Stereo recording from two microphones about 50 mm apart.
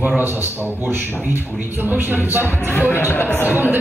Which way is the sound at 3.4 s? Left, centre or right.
Right.